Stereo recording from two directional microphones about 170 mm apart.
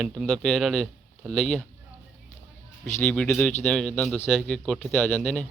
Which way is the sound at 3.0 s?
5° left (ahead or behind).